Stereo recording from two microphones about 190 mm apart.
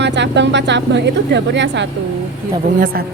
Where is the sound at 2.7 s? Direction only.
45° right (ahead or behind).